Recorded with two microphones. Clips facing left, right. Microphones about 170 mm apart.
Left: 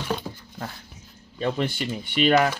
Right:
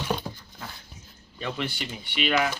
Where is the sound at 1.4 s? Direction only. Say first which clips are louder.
Left 6 dB; 45° left (ahead or behind).